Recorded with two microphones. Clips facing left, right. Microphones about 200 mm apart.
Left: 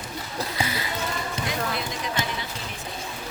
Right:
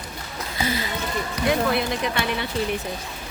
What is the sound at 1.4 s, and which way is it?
Basketball bounce, 65° right (ahead or behind).